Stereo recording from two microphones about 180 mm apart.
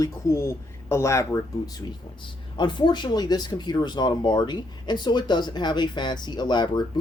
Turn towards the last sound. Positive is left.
turn(degrees=25)  # may be behind; listen again after turning